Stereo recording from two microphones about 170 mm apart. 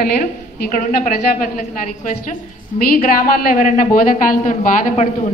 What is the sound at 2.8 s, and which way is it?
A woman's voice, 60° left (ahead or behind).